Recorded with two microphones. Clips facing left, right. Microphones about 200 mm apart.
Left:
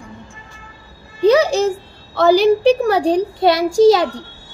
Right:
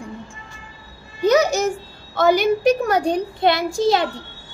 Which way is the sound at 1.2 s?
30° left (ahead or behind).